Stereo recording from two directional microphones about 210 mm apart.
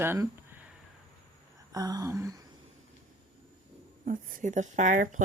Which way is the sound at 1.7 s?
20° right (ahead or behind).